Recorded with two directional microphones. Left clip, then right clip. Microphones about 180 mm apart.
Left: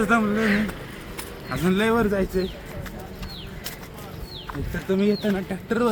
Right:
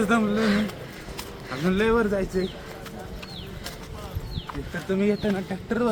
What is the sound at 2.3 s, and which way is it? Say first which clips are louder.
Speech: left 1 dB; 35° left (ahead or behind).